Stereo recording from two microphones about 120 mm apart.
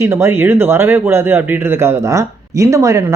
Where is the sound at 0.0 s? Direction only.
25° right (ahead or behind).